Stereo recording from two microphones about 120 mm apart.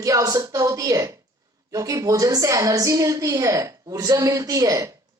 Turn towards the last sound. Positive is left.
turn(degrees=-30)  # may be behind; listen again after turning